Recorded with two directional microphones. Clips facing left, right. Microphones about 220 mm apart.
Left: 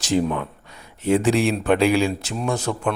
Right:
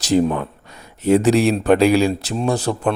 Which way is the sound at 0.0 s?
40° right (ahead or behind).